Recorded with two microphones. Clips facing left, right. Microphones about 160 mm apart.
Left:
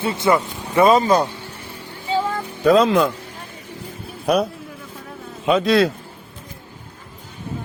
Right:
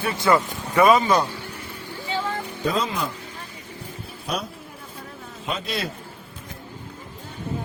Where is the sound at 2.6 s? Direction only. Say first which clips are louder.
Left 12 dB; 75° left (ahead or behind).